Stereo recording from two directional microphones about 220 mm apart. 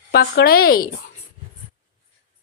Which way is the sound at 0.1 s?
45° left (ahead or behind).